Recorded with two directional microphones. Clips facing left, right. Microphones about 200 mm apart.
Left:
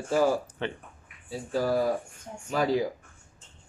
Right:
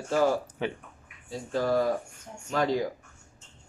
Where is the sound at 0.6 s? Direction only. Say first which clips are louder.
Right 2 dB; 10° right (ahead or behind).